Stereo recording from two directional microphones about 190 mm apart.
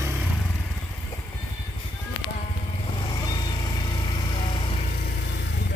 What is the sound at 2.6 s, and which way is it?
Vehicle, 30° left (ahead or behind).